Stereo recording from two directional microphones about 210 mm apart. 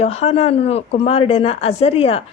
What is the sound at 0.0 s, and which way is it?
Speech, 30° left (ahead or behind).